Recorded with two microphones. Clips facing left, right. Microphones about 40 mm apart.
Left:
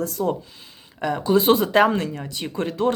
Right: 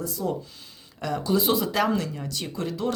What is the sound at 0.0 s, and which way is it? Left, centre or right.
Speech, left.